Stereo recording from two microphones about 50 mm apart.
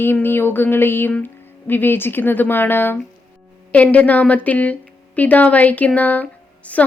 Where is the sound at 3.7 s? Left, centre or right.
Left.